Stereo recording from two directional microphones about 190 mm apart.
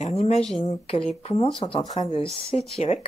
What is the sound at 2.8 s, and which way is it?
Speech, 35° left (ahead or behind).